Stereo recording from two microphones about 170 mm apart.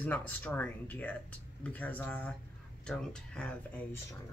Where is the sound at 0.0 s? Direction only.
10° left (ahead or behind).